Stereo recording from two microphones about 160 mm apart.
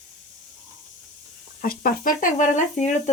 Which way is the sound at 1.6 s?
65° left (ahead or behind).